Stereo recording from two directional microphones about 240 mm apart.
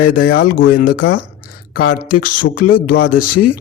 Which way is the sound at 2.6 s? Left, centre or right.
Left.